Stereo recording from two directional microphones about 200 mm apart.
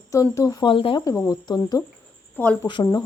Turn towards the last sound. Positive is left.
turn(degrees=20)  # may be behind; listen again after turning